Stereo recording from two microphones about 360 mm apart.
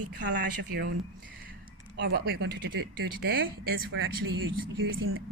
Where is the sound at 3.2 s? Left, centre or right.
Right.